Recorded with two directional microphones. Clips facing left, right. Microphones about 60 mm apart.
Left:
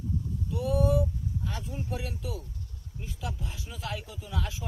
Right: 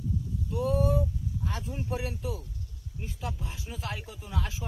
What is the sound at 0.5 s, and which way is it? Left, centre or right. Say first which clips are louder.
Vehicle: right 2 dB; right.